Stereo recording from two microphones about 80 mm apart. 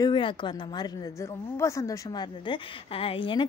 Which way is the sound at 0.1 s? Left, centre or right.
Left.